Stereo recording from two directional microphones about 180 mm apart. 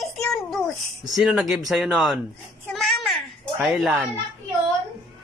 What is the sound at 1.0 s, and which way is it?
Speech, centre (ahead or behind).